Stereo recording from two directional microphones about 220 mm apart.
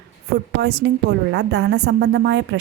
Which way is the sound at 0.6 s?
50° right (ahead or behind).